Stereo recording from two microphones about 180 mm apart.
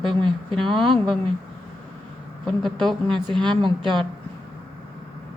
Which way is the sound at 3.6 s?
25° right (ahead or behind).